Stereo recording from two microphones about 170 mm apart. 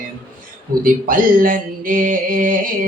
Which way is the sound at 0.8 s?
55° right (ahead or behind).